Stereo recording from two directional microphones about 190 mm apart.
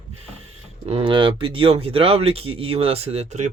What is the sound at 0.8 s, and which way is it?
Speech, 30° right (ahead or behind).